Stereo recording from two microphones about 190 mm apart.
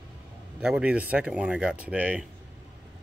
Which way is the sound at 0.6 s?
5° right (ahead or behind).